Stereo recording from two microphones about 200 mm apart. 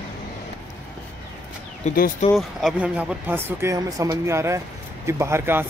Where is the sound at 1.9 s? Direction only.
45° left (ahead or behind).